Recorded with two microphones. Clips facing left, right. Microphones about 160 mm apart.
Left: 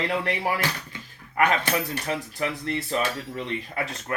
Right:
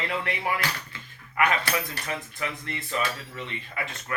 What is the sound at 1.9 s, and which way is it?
Speech, 35° left (ahead or behind).